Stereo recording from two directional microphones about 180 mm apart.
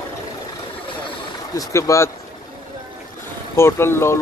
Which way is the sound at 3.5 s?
15° left (ahead or behind).